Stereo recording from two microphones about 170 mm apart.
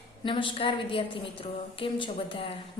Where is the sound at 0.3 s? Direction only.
30° left (ahead or behind).